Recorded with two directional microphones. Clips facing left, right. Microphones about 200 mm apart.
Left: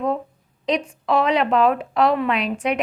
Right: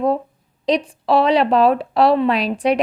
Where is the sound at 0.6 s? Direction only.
35° right (ahead or behind).